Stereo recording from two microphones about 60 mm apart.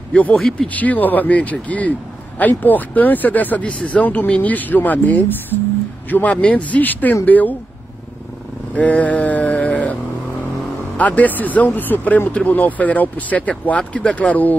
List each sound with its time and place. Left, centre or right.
0.3 s speech: centre
0.7 s a man's voice: left
8.7 s a sound: left
11.0 s a man's voice: left